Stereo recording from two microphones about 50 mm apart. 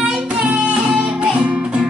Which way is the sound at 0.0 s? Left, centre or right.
Centre.